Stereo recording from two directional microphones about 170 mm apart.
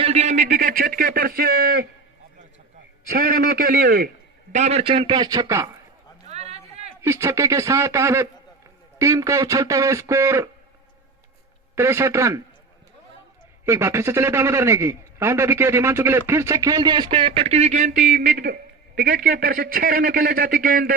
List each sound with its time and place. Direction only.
0.0 s a sound: 40° right (ahead or behind)
0.5 s speech: 55° right (ahead or behind)
3.2 s a man's voice: 60° right (ahead or behind)
4.5 s speech: 40° right (ahead or behind); by 5.7 s 20° right (ahead or behind)
6.2 s a sound: 40° right (ahead or behind)
7.0 s a man's voice: 15° right (ahead or behind)
11.7 s a man's voice: 15° right (ahead or behind)
13.7 s a man's voice: 15° right (ahead or behind); by 17.9 s 45° right (ahead or behind)
19.0 s a man's voice: 70° right (ahead or behind)